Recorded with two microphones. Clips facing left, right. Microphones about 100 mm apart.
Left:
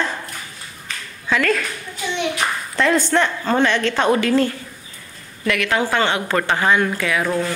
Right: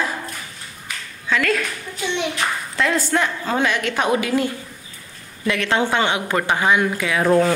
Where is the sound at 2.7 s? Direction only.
Centre (ahead or behind).